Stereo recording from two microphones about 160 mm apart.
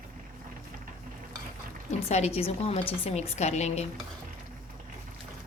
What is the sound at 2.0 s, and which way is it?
A woman's voice, 40° left (ahead or behind).